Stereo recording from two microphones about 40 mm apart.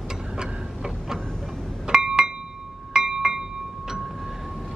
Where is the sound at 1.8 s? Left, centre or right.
Centre.